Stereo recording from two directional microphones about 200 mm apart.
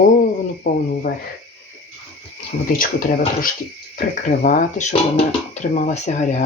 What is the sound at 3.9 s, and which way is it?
Speech, 40° left (ahead or behind).